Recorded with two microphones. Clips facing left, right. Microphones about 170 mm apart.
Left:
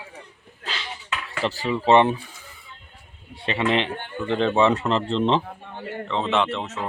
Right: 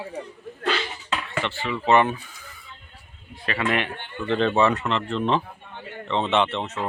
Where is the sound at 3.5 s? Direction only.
25° left (ahead or behind).